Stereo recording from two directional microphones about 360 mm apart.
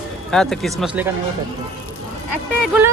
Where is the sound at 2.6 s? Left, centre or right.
Centre.